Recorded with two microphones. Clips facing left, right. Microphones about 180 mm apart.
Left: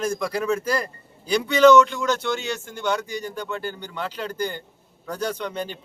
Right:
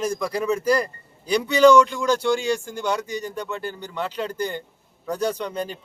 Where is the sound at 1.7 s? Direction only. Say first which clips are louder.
Even; 10° right (ahead or behind).